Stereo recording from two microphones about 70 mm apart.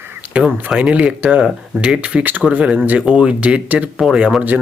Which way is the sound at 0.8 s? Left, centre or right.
Centre.